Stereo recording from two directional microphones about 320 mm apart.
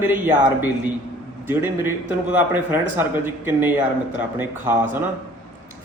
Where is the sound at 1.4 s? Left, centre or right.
Centre.